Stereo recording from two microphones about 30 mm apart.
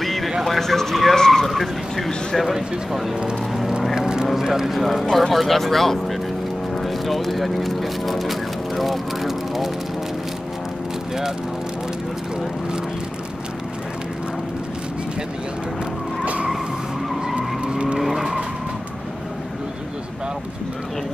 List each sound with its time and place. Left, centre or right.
0.0 s music: centre
0.6 s speech: centre
1.1 s vehicle: centre
1.5 s speech: centre
3.9 s vehicle: right
4.4 s speech: centre
4.7 s speech: centre
17.6 s vehicle: right
17.9 s vehicle: centre